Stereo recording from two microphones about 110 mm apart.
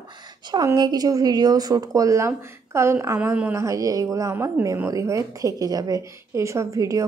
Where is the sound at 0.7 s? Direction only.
40° right (ahead or behind).